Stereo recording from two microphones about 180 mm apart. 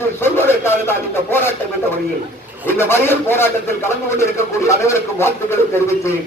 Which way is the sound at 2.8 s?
15° left (ahead or behind).